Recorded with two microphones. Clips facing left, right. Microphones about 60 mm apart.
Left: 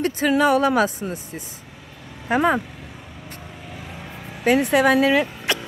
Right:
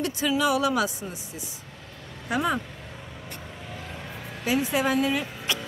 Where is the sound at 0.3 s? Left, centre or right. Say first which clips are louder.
Left 6 dB; left.